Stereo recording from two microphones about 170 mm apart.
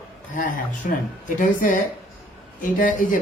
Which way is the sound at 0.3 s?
55° left (ahead or behind).